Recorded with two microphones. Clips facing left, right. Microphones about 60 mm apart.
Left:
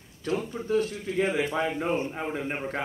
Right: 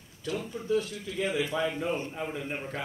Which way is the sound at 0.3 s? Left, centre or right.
Left.